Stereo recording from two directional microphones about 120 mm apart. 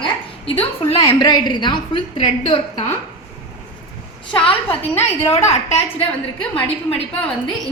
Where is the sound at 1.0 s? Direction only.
35° left (ahead or behind); by 2.9 s 55° left (ahead or behind).